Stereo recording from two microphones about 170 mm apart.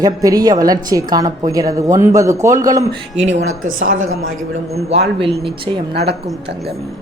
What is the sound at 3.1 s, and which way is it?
Speech, 40° right (ahead or behind).